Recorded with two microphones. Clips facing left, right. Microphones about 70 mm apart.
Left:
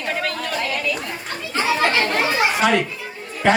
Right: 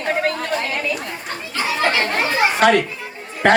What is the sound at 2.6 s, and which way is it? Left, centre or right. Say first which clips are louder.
Speech: right 3 dB; right.